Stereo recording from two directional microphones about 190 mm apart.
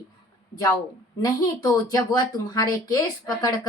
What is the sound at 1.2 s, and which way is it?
Speech, 15° left (ahead or behind).